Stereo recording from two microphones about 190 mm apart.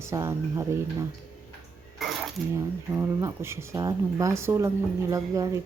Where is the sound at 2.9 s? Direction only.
15° right (ahead or behind).